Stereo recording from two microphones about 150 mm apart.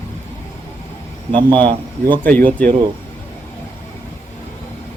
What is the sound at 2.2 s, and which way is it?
Speech, 10° left (ahead or behind).